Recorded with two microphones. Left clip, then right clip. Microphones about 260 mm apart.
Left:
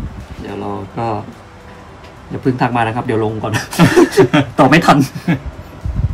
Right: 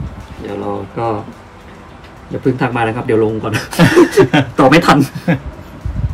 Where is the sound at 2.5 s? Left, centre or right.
Centre.